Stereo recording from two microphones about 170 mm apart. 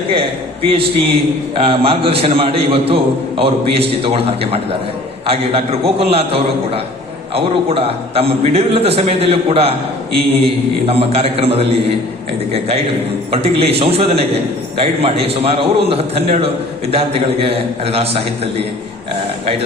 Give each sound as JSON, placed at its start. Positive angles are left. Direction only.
{"t": 0.1, "sound": "a man's voice", "side_deg": -35}